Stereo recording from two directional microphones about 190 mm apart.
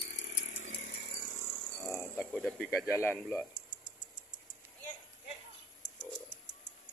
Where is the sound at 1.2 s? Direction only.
40° left (ahead or behind).